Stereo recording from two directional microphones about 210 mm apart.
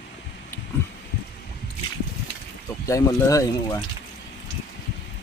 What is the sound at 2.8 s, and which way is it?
Speech, 15° left (ahead or behind).